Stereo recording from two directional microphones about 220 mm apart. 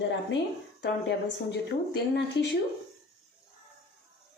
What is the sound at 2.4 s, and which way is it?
Speech, 50° left (ahead or behind).